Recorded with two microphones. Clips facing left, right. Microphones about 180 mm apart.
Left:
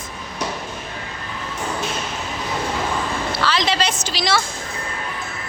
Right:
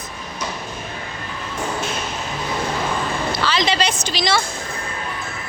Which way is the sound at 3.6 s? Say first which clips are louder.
Right 1 dB; 5° left (ahead or behind).